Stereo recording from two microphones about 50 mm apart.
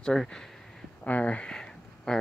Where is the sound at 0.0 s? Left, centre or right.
Centre.